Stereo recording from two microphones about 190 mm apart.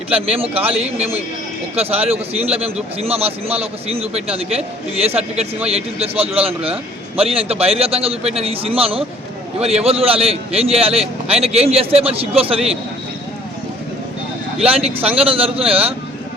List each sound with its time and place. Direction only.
0.1 s a man's voice: 30° right (ahead or behind)
15.1 s a man's voice: 30° right (ahead or behind)